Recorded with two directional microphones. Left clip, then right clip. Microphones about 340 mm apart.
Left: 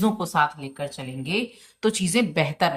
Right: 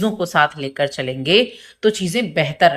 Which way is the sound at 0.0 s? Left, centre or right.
Centre.